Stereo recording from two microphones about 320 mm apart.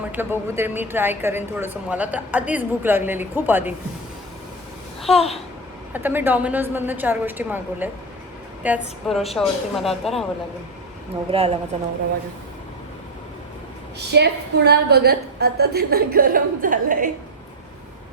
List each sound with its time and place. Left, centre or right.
0.1 s speech: centre
5.1 s a child's voice: centre
5.9 s a woman's voice: centre
11.3 s a woman's voice: centre
14.1 s a woman's voice: right